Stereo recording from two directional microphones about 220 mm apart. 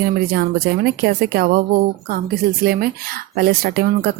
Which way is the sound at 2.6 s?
45° right (ahead or behind).